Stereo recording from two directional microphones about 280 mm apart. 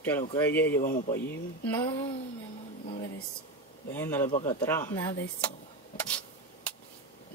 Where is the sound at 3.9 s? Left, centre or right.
Centre.